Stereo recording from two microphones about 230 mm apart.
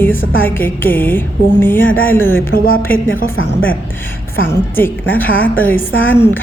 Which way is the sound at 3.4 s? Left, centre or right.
Left.